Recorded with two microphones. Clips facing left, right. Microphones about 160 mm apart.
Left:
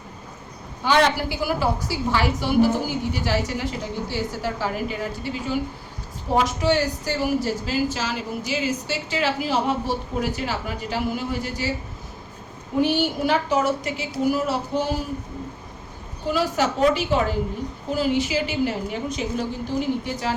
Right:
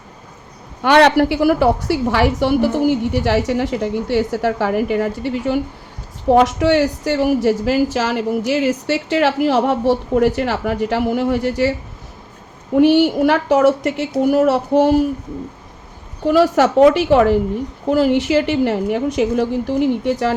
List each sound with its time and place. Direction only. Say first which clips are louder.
0.8 s a woman's voice: right 8 dB; 70° right (ahead or behind)
12.8 s a woman's voice: right 10 dB; 70° right (ahead or behind)
16.2 s a woman's voice: right 9 dB; 65° right (ahead or behind)